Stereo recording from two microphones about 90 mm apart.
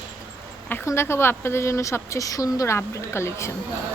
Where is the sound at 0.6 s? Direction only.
25° left (ahead or behind).